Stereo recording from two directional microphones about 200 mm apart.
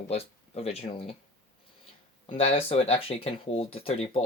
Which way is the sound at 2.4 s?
30° left (ahead or behind).